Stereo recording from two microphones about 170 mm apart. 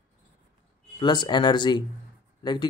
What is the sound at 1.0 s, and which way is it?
Speech, 25° left (ahead or behind).